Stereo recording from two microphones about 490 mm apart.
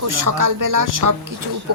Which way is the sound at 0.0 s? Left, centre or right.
Right.